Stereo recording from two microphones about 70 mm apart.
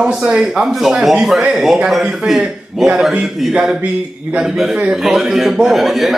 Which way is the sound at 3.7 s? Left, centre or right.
Right.